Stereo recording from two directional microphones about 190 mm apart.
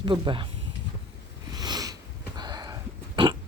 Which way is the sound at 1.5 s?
20° right (ahead or behind).